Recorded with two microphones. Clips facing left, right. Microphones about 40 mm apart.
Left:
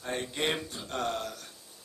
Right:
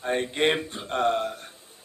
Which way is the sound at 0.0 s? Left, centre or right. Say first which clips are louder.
Right 8 dB; right.